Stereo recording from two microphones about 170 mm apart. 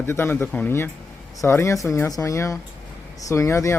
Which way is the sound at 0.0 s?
15° left (ahead or behind).